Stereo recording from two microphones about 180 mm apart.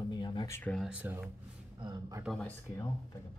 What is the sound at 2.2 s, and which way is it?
Speech, 5° left (ahead or behind).